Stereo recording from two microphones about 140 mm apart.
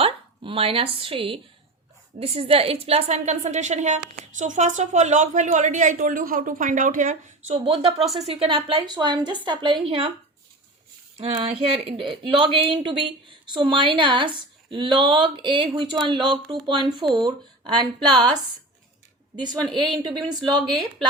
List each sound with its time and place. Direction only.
0.0 s a woman's voice: 40° right (ahead or behind); by 7.5 s 60° right (ahead or behind)
7.5 s a woman's voice: 40° right (ahead or behind)
11.2 s a woman's voice: 40° right (ahead or behind)
19.4 s a woman's voice: 35° right (ahead or behind)